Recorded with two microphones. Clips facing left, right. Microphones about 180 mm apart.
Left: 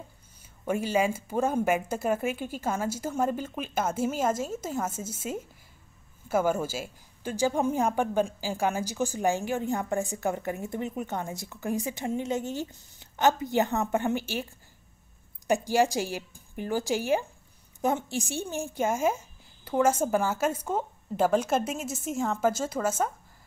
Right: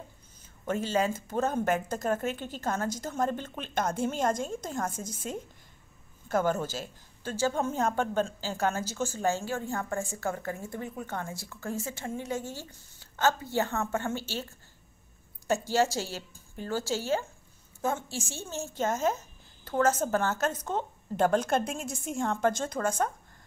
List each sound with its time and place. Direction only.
0.7 s a woman's voice: 10° left (ahead or behind)